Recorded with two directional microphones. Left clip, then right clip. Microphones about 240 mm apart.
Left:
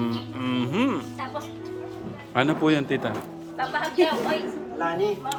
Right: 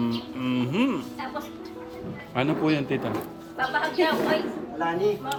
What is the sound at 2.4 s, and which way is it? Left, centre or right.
Speech, centre.